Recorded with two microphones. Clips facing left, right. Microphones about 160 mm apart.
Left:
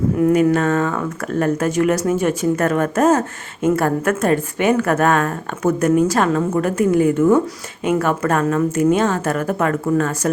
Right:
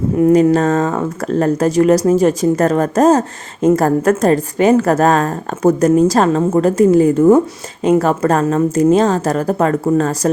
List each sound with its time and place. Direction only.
0.2 s speech: 30° right (ahead or behind)